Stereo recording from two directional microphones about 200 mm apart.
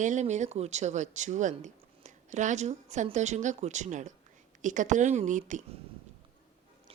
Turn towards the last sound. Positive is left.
turn(degrees=-40)  # may be behind; listen again after turning